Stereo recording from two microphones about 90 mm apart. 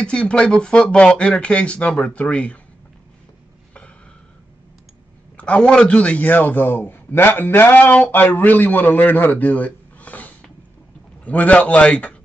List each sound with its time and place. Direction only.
0.0 s speech: 10° left (ahead or behind)
5.4 s a man's voice: 10° left (ahead or behind)